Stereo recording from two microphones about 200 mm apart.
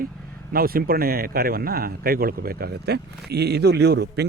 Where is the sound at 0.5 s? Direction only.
45° right (ahead or behind).